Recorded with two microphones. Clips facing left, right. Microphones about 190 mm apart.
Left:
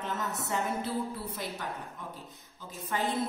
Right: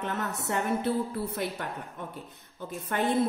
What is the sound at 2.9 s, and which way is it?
Speech, 60° right (ahead or behind).